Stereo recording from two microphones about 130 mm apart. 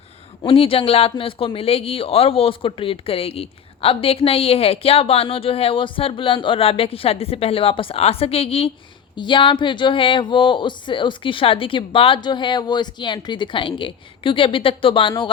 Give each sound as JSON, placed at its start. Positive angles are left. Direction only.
{"t": 0.4, "sound": "speech", "side_deg": 45}
{"t": 9.1, "sound": "speech", "side_deg": 40}